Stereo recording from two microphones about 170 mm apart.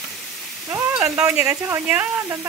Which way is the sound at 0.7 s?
15° right (ahead or behind).